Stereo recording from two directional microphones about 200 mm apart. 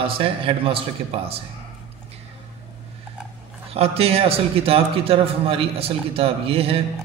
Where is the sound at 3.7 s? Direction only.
30° right (ahead or behind).